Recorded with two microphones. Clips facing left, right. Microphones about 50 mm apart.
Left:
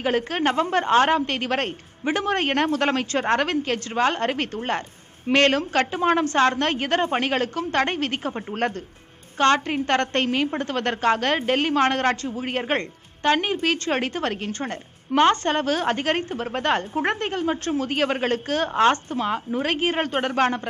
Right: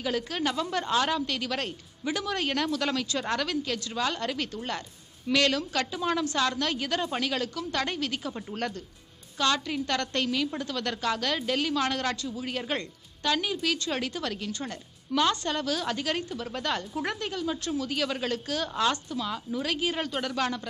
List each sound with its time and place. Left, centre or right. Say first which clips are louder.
0.0 s a woman's voice: left 7 dB; left